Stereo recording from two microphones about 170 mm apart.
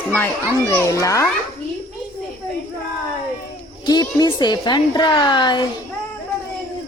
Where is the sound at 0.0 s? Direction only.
10° left (ahead or behind).